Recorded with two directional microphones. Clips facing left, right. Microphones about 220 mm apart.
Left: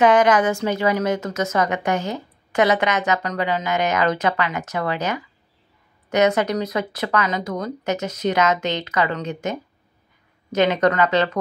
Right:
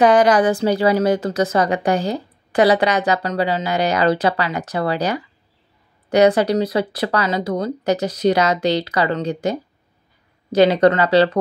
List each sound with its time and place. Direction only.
0.0 s a woman's voice: 35° right (ahead or behind)